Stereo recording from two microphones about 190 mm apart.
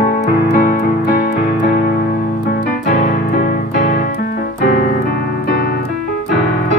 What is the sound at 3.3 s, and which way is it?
Piano, 50° left (ahead or behind).